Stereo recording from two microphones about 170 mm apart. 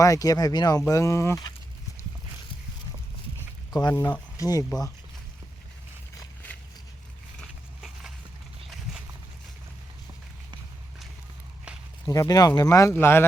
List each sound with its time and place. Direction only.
0.0 s speech: 20° left (ahead or behind)
3.7 s speech: 25° left (ahead or behind)
7.3 s a sound: centre (ahead or behind)
12.0 s speech: 20° left (ahead or behind)